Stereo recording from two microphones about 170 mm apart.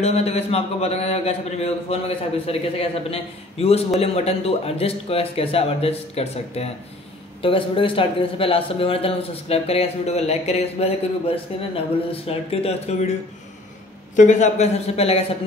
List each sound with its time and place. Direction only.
0.0 s a man's voice: 40° left (ahead or behind)
14.1 s a man's voice: 45° left (ahead or behind)